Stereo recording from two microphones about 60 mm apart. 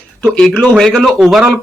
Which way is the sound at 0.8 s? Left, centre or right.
Centre.